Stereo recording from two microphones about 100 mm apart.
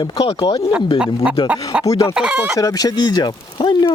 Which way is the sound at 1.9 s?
35° left (ahead or behind).